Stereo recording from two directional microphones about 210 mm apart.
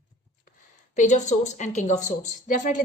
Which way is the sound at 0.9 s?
35° left (ahead or behind).